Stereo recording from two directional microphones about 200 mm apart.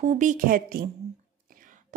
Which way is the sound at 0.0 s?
35° right (ahead or behind).